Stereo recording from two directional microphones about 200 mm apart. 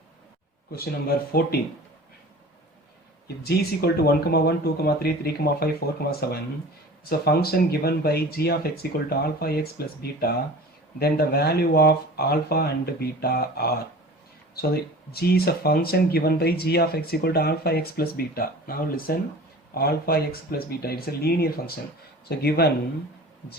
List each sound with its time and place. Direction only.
0.8 s speech: 50° left (ahead or behind)
3.2 s speech: 50° left (ahead or behind)
15.1 s speech: 50° left (ahead or behind)